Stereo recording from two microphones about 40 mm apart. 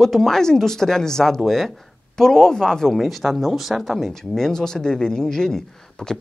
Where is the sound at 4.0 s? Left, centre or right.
Centre.